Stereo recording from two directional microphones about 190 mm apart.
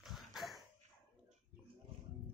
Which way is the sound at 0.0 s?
Centre (ahead or behind).